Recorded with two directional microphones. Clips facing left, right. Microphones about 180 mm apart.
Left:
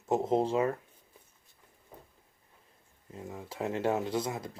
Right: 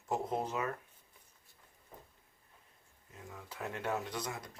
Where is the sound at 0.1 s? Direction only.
25° left (ahead or behind).